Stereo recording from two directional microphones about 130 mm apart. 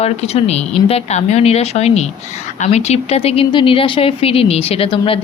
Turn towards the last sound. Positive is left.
turn(degrees=45)  # may be behind; listen again after turning